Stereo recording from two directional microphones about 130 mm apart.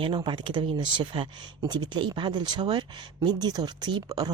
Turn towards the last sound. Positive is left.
turn(degrees=-30)  # may be behind; listen again after turning